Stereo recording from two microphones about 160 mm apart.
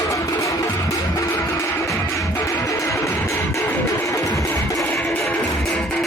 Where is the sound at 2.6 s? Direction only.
20° left (ahead or behind).